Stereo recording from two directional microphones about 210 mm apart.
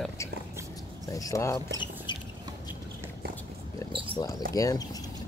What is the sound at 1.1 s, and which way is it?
Speech, 15° left (ahead or behind).